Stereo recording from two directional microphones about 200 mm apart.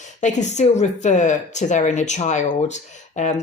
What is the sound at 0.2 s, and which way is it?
Speech, 35° left (ahead or behind).